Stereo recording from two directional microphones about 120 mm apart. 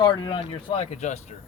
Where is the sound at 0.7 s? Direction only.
75° left (ahead or behind).